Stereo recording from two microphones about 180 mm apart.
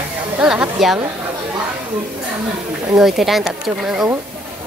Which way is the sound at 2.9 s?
Centre (ahead or behind).